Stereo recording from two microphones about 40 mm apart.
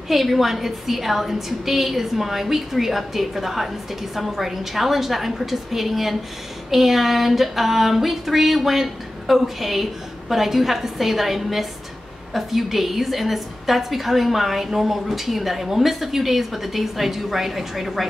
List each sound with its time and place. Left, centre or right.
0.1 s a woman's voice: centre